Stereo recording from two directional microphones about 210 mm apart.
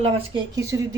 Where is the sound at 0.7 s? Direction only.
15° right (ahead or behind).